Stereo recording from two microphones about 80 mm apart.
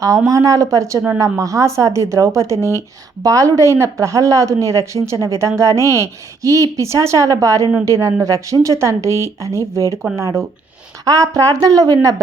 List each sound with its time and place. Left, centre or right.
0.3 s a woman's voice: right